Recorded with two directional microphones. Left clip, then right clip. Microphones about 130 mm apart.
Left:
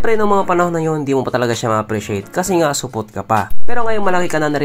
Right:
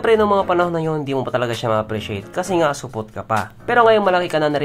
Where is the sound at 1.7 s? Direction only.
20° left (ahead or behind).